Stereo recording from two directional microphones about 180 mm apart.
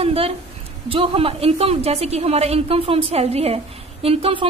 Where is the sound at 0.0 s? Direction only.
35° right (ahead or behind).